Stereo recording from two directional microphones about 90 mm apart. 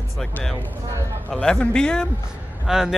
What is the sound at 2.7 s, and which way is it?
Speech, 5° right (ahead or behind).